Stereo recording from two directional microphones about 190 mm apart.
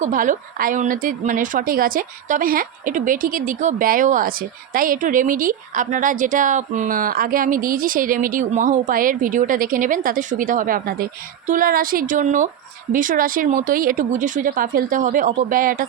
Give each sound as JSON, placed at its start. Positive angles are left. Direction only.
{"t": 0.0, "sound": "speech", "side_deg": -45}